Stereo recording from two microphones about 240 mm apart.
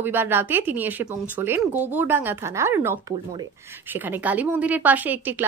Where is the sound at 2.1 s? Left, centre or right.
Centre.